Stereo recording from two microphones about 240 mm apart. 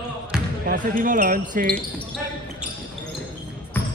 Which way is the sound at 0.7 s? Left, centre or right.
Right.